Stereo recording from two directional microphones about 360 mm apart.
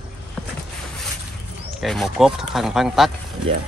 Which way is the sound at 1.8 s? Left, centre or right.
Centre.